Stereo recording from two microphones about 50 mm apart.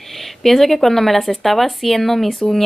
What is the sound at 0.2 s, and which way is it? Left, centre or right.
Speech, centre.